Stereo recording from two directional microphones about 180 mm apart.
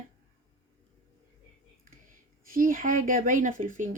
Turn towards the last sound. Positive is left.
turn(degrees=-45)  # may be behind; listen again after turning